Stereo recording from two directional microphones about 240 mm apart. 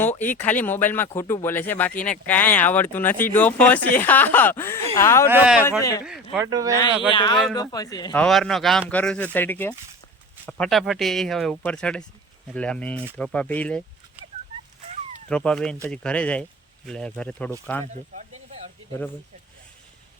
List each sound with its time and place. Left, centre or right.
0.0 s speech: centre
5.3 s speech: centre
7.1 s speech: centre
8.1 s speech: centre
15.3 s speech: centre
18.1 s a sound: right